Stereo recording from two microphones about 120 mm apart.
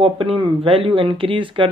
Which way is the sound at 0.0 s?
50° right (ahead or behind).